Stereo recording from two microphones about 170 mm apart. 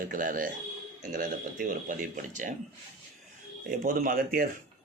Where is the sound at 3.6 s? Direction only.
55° right (ahead or behind).